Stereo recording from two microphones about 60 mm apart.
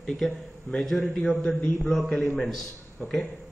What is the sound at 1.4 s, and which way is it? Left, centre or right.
Speech, left.